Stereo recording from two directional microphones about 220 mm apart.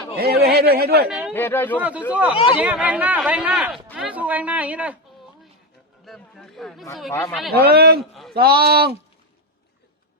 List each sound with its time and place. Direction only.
0.2 s speech: 45° right (ahead or behind)
1.0 s speech: 5° right (ahead or behind)
1.3 s speech: 10° left (ahead or behind)
1.8 s speech: 5° right (ahead or behind)
2.3 s speech: 25° left (ahead or behind)
2.6 s speech: 5° right (ahead or behind)
6.1 s speech: centre (ahead or behind)
7.5 s speech: 45° right (ahead or behind)